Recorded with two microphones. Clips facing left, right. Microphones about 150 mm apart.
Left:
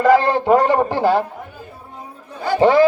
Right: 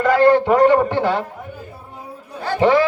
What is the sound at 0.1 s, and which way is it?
A man's voice, 30° left (ahead or behind).